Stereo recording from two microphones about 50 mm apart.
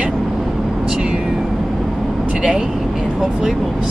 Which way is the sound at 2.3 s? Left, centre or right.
Centre.